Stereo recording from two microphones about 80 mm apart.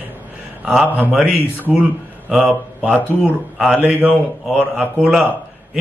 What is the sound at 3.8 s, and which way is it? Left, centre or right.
A man's voice, right.